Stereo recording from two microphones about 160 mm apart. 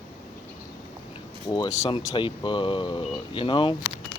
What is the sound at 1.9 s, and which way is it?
Speech, 30° left (ahead or behind).